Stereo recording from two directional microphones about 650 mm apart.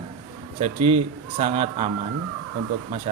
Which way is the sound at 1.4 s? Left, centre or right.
Centre.